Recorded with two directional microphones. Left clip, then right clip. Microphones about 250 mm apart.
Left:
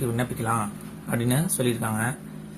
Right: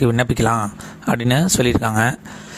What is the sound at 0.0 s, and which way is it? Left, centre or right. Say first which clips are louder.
Speech: right 11 dB; right.